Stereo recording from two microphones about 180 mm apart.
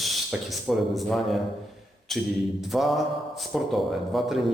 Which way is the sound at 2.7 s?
Centre (ahead or behind).